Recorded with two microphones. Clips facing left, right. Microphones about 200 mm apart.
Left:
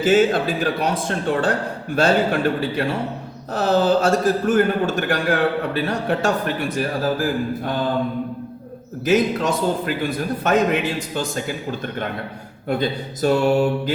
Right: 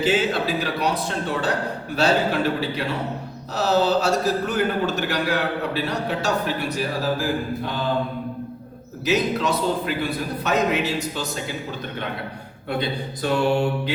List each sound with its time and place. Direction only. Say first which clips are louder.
0.0 s a man's voice: left 5 dB; 50° left (ahead or behind)
9.0 s a man's voice: left 3 dB; 50° left (ahead or behind)
13.2 s mantra: left 4 dB; 40° left (ahead or behind)